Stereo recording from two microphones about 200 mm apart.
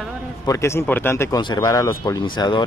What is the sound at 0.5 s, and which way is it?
Speech, 15° left (ahead or behind).